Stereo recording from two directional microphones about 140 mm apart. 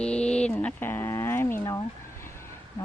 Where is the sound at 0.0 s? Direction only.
5° left (ahead or behind).